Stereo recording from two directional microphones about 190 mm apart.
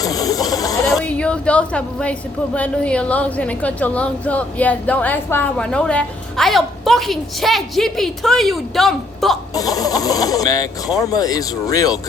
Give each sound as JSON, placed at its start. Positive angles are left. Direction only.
{"t": 0.0, "sound": "a sound", "side_deg": 20}
{"t": 0.9, "sound": "a woman's voice", "side_deg": 5}
{"t": 9.6, "sound": "speech", "side_deg": 20}